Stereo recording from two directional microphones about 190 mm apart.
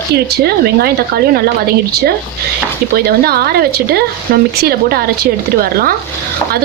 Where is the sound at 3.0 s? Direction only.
55° right (ahead or behind).